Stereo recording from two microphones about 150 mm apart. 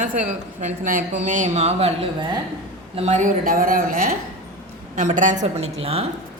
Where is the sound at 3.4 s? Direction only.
75° right (ahead or behind).